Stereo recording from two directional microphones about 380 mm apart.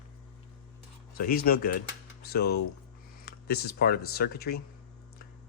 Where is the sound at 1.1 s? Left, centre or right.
Left.